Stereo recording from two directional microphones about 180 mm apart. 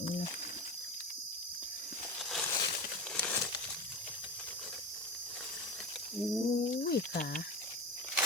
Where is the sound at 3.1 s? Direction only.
10° left (ahead or behind).